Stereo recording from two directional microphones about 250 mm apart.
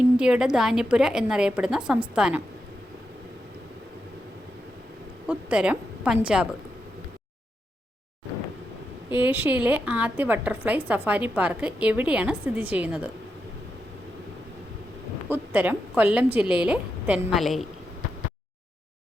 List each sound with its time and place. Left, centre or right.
0.2 s a woman's voice: centre
5.2 s a woman's voice: centre
9.1 s a woman's voice: centre
15.3 s a woman's voice: centre